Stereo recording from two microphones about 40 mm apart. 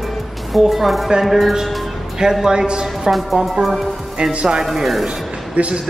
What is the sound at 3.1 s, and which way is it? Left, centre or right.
Speech, centre.